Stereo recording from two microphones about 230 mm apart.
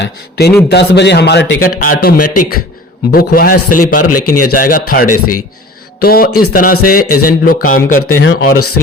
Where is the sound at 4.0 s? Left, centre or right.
Left.